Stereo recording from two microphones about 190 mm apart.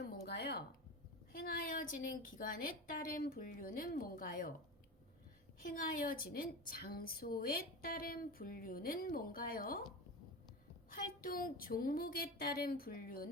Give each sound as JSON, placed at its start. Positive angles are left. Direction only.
{"t": 0.0, "sound": "a sound", "side_deg": 55}
{"t": 1.3, "sound": "a woman's voice", "side_deg": 50}
{"t": 5.6, "sound": "a woman's voice", "side_deg": 45}
{"t": 10.9, "sound": "a woman's voice", "side_deg": 50}